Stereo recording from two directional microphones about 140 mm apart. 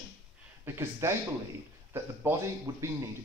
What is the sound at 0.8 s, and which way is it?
Speech, 20° right (ahead or behind).